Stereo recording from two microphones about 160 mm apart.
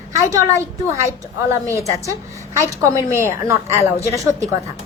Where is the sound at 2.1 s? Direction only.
20° right (ahead or behind).